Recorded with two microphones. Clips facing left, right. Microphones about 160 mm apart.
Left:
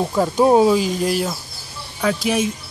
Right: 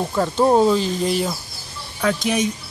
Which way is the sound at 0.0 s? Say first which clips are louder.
Left 2 dB; 10° left (ahead or behind).